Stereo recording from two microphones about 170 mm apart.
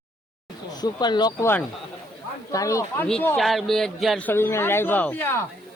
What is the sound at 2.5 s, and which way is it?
Speech, 20° left (ahead or behind).